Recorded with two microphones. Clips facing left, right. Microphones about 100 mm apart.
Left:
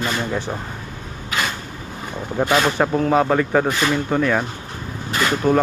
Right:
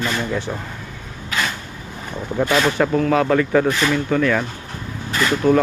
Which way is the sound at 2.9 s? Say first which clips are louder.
Left 1 dB; 25° left (ahead or behind).